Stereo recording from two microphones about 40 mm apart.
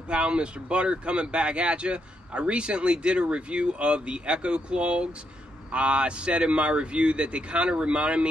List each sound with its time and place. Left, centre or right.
0.1 s speech: right